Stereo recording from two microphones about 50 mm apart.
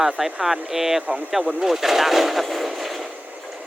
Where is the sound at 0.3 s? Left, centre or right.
Centre.